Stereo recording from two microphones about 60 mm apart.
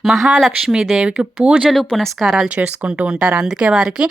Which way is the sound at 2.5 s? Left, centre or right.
Right.